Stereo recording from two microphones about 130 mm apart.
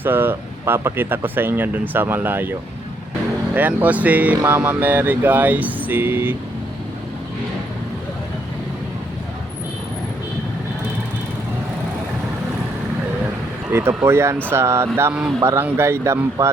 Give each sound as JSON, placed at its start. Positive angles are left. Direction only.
{"t": 0.0, "sound": "speech", "side_deg": -15}
{"t": 13.7, "sound": "speech", "side_deg": -20}